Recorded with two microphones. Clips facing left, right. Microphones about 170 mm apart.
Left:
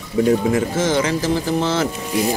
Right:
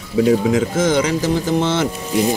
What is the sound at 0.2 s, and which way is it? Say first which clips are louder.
Speech: right 2 dB; 10° right (ahead or behind).